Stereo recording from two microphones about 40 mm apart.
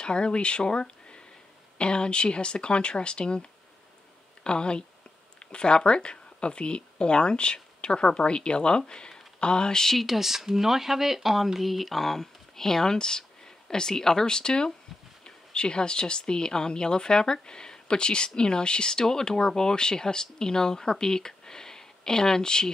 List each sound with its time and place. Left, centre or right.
0.0 s speech: left
9.8 s speech: centre